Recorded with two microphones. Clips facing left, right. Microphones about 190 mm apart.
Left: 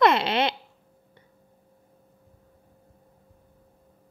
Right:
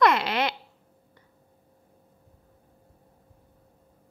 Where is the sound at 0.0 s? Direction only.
25° left (ahead or behind).